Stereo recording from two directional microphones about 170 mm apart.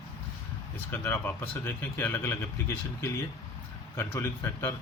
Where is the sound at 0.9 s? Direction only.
15° left (ahead or behind).